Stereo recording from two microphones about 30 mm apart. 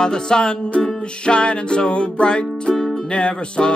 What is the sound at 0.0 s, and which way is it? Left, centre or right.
Music, left.